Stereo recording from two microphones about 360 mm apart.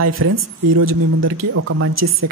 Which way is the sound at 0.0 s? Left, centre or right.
Right.